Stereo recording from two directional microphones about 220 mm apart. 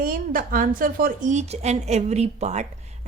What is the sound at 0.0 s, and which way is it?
A woman's voice, 40° right (ahead or behind).